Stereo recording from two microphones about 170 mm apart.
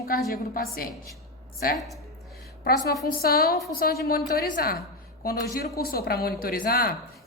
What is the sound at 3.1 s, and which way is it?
A woman's voice, 65° left (ahead or behind).